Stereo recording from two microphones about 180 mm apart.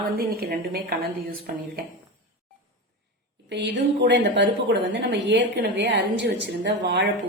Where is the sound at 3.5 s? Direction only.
75° right (ahead or behind).